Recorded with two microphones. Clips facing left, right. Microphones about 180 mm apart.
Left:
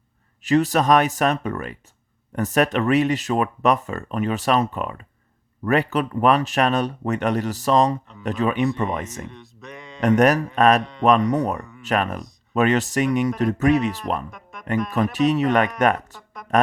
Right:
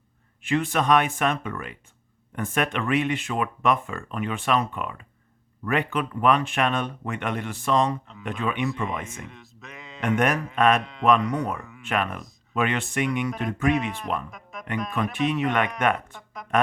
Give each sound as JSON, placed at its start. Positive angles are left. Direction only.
{"t": 0.4, "sound": "speech", "side_deg": 40}
{"t": 9.2, "sound": "a sound", "side_deg": 0}
{"t": 10.0, "sound": "speech", "side_deg": 40}
{"t": 14.3, "sound": "music", "side_deg": 0}
{"t": 15.2, "sound": "speech", "side_deg": 40}
{"t": 16.1, "sound": "a sound", "side_deg": 0}